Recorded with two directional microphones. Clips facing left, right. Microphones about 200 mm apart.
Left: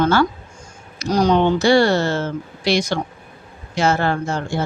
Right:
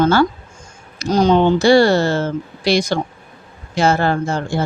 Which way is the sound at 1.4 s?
35° right (ahead or behind).